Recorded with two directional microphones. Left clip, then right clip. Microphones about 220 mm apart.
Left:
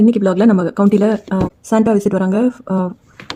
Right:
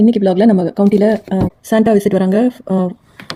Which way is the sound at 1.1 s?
20° left (ahead or behind).